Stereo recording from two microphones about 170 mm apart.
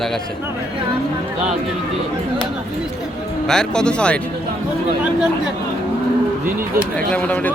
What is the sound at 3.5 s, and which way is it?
Speech, 5° left (ahead or behind).